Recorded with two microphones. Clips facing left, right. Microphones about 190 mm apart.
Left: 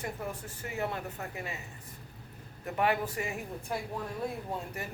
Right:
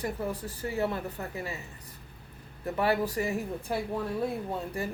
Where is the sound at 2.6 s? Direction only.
35° right (ahead or behind).